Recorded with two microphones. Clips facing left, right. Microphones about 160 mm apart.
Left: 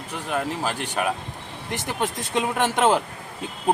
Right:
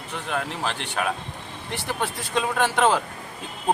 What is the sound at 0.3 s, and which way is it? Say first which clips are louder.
A man's voice: left 2 dB; 5° left (ahead or behind).